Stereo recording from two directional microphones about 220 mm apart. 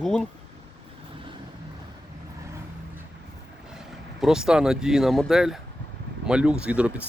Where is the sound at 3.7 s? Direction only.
Centre (ahead or behind).